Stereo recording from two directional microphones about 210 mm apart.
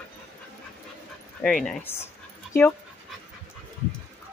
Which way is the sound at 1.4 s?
5° left (ahead or behind).